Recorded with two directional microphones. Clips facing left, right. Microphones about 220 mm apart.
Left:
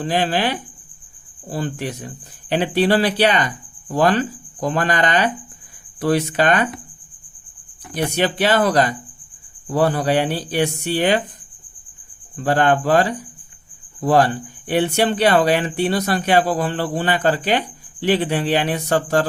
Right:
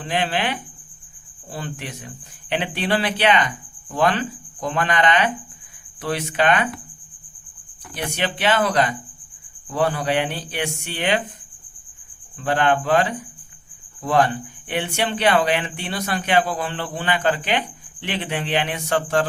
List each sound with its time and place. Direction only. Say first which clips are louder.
0.0 s speech: left 4 dB; 40° left (ahead or behind)
7.9 s speech: left 6 dB; 40° left (ahead or behind)
12.4 s speech: left 3 dB; 40° left (ahead or behind)